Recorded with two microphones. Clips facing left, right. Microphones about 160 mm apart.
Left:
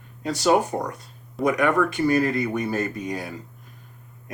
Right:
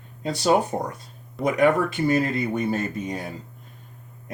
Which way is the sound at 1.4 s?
Centre (ahead or behind).